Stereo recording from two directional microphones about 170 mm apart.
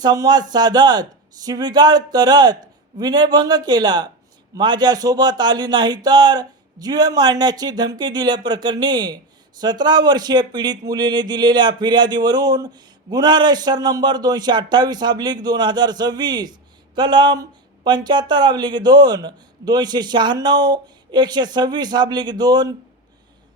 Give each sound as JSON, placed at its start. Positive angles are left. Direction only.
{"t": 0.0, "sound": "a man's voice", "side_deg": -25}